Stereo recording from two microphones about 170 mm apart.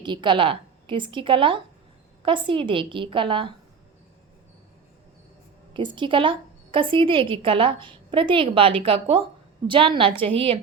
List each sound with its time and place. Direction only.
0.0 s a woman's voice: 25° right (ahead or behind)
5.7 s a woman's voice: 30° right (ahead or behind)